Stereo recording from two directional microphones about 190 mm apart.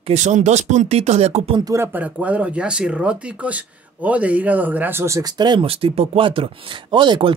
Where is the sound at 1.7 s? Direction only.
10° right (ahead or behind).